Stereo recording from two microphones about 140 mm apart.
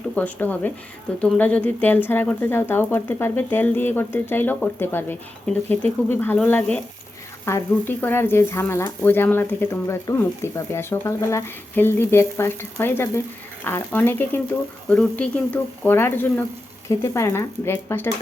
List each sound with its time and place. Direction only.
0.2 s speech: 10° left (ahead or behind)